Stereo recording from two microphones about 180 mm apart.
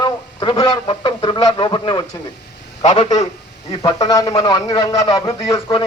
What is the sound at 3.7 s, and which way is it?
Speech, 20° left (ahead or behind).